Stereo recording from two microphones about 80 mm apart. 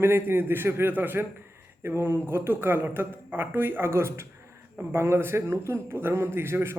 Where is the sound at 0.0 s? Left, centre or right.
Right.